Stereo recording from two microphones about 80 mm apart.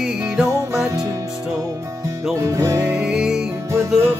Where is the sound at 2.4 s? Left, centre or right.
Right.